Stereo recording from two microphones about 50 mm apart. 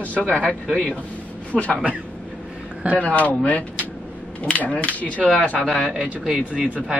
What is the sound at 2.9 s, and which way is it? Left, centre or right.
Speech, left.